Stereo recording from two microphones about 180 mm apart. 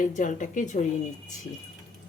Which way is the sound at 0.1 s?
45° left (ahead or behind).